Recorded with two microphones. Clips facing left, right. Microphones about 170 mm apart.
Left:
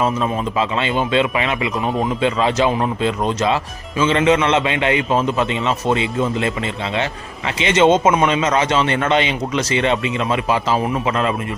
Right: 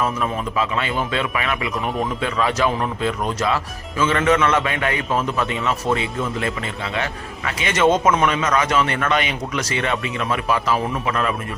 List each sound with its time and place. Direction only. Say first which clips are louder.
0.0 s speech: left 3 dB; 25° left (ahead or behind)